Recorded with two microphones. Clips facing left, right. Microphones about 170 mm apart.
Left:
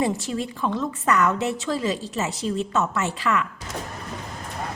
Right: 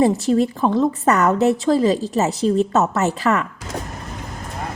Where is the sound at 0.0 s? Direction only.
35° right (ahead or behind).